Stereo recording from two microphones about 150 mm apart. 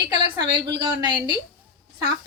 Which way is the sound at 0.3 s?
25° right (ahead or behind).